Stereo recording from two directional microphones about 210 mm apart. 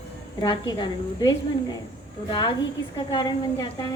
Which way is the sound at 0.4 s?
20° left (ahead or behind).